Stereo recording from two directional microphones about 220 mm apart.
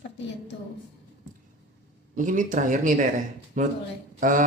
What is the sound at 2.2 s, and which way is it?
Speech, 35° right (ahead or behind).